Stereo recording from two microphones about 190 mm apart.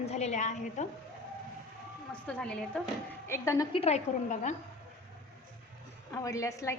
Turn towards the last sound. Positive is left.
turn(degrees=15)  # may be behind; listen again after turning